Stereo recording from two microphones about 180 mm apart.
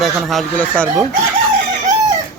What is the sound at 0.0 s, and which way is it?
Speech, centre (ahead or behind).